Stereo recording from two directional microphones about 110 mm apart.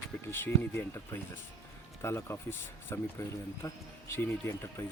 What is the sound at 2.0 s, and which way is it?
Speech, 25° left (ahead or behind).